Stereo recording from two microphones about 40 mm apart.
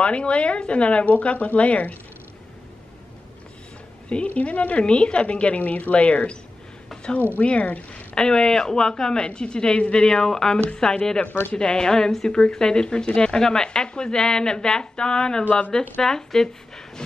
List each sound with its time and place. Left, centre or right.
0.0 s speech: left
4.3 s speech: left
5.6 s speech: left
7.3 s speech: left
8.1 s a woman's voice: centre